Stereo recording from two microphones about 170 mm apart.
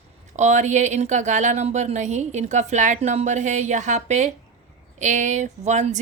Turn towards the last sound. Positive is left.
turn(degrees=-45)  # may be behind; listen again after turning